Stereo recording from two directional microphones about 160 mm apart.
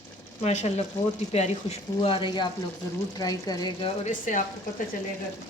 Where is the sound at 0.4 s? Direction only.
45° left (ahead or behind).